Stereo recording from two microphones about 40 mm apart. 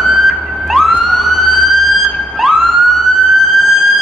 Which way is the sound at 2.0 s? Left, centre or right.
Centre.